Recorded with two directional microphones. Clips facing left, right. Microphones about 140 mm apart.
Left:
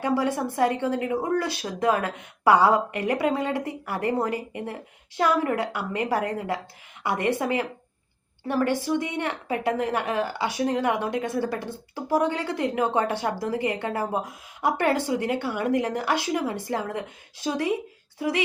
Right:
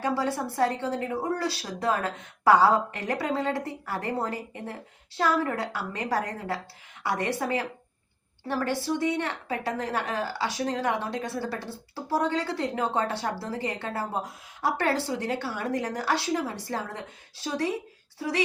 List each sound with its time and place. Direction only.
0.0 s a woman's voice: 15° left (ahead or behind)